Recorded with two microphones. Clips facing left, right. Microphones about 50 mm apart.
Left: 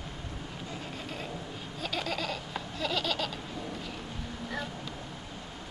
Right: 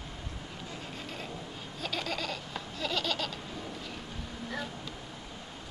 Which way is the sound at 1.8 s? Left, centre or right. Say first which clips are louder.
Left 1 dB; centre.